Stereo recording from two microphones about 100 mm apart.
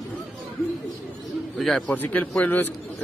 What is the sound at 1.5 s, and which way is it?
Speech, centre (ahead or behind).